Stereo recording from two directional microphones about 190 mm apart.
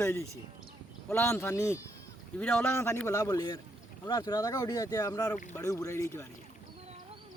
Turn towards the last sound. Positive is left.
turn(degrees=15)  # may be behind; listen again after turning